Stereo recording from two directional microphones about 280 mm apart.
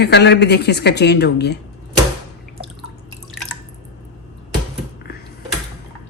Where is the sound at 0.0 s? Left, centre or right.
Left.